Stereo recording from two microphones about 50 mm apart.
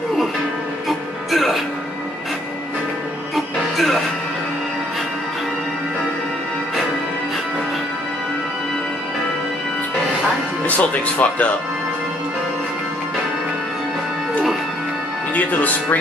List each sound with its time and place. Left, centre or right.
0.8 s music: centre
3.3 s music: centre
10.8 s music: left
15.3 s speech: left